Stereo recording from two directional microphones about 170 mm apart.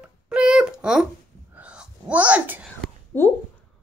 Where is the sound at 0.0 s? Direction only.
5° right (ahead or behind).